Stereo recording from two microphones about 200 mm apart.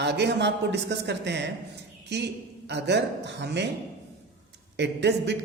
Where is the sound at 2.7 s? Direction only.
60° right (ahead or behind).